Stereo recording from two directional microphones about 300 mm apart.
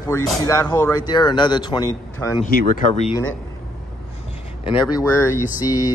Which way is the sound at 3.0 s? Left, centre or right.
Centre.